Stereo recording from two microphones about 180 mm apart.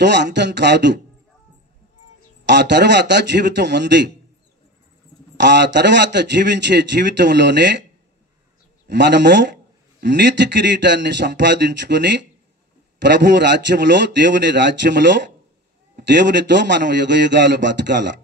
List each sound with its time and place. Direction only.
0.0 s a man's voice: 75° right (ahead or behind)
2.4 s a man's voice: 75° right (ahead or behind)
5.4 s a man's voice: 75° right (ahead or behind)
8.8 s a man's voice: 75° right (ahead or behind)